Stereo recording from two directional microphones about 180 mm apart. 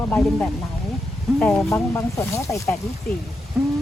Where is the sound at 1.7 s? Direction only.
15° left (ahead or behind).